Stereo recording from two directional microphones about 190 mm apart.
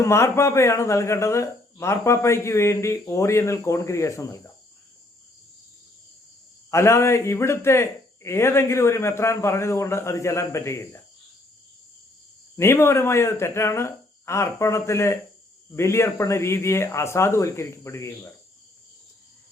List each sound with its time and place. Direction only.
0.0 s speech: 15° left (ahead or behind)
6.7 s speech: 15° left (ahead or behind)
12.5 s speech: 15° left (ahead or behind)